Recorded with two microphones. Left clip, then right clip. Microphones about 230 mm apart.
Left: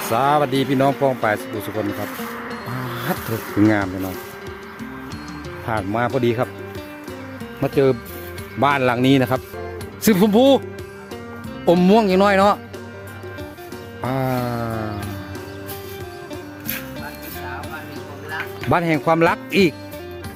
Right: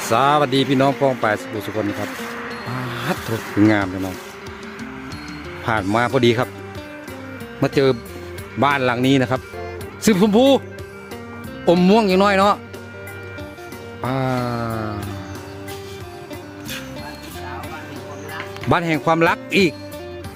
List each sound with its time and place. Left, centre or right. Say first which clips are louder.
0.1 s speech: right 2 dB; centre
2.5 s music: right 1 dB; centre
3.6 s speech: right 1 dB; centre
5.6 s speech: right 3 dB; centre
7.6 s speech: even; centre
11.6 s speech: even; centre
14.0 s music: even; centre
18.7 s speech: even; centre